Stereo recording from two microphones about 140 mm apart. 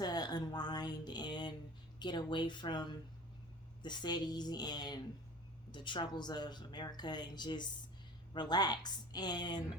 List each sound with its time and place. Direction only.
0.0 s a sound: 30° left (ahead or behind)
2.0 s speech: 30° left (ahead or behind)
3.8 s speech: 30° left (ahead or behind)